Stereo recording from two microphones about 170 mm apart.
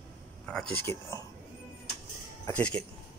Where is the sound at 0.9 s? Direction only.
15° left (ahead or behind).